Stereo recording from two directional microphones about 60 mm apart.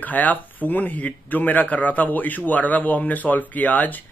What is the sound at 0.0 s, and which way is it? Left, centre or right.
Speech, left.